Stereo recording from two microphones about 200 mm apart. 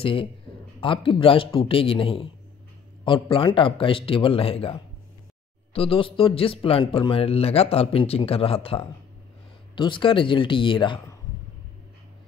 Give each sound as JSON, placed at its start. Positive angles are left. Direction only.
{"t": 0.0, "sound": "a man's voice", "side_deg": 25}